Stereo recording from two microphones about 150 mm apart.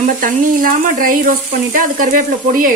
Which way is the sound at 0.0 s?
65° right (ahead or behind).